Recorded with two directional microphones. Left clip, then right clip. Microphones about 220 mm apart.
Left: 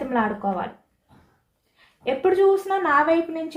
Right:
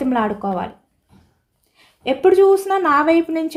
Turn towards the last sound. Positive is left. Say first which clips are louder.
# right 5 dB
turn(degrees=-50)  # may be behind; listen again after turning